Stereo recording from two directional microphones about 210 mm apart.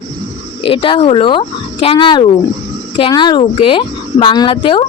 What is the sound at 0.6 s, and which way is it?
A woman's voice, 25° left (ahead or behind).